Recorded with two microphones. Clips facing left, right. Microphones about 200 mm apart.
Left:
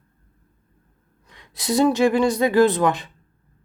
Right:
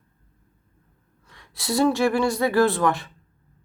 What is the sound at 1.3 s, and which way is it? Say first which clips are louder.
Speech: left 3 dB; 20° left (ahead or behind).